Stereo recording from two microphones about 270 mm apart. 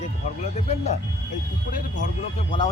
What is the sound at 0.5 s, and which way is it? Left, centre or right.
Speech, left.